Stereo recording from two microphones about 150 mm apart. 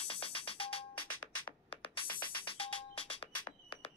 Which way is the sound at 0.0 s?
40° left (ahead or behind).